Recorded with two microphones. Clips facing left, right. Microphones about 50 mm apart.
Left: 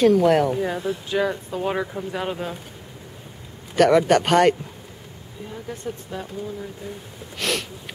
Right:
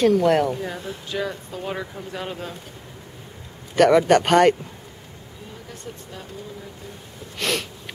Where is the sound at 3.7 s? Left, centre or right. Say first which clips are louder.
Right 1 dB; centre.